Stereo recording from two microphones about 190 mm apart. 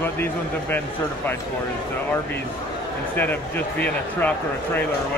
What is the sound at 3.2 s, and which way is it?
Speech, 10° left (ahead or behind).